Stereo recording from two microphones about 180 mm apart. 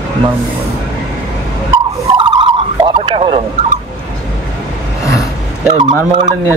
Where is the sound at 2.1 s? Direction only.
25° right (ahead or behind).